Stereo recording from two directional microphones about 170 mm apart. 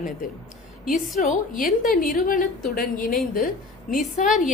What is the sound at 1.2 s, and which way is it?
A woman's voice, 50° left (ahead or behind).